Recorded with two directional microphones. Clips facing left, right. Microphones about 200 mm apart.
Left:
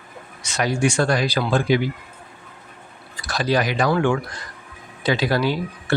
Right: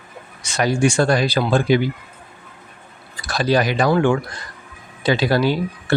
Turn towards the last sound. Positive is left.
turn(degrees=-30)  # may be behind; listen again after turning